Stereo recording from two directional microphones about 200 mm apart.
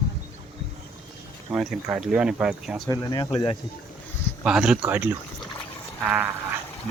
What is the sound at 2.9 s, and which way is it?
Speech, 20° left (ahead or behind).